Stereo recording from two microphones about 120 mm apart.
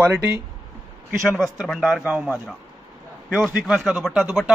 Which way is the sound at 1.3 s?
Centre (ahead or behind).